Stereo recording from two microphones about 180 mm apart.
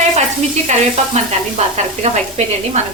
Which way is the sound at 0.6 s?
40° right (ahead or behind).